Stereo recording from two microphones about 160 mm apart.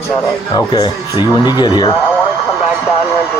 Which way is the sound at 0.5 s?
25° left (ahead or behind).